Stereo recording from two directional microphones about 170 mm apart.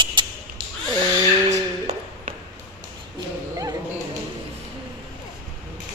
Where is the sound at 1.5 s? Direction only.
40° right (ahead or behind).